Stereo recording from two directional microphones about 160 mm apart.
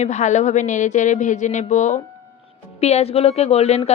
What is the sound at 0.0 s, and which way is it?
Speech, 50° left (ahead or behind).